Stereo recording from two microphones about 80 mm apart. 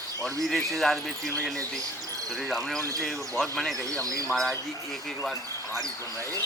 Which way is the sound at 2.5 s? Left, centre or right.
Centre.